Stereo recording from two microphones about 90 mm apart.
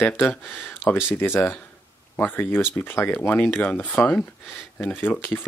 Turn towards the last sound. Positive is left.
turn(degrees=20)  # may be behind; listen again after turning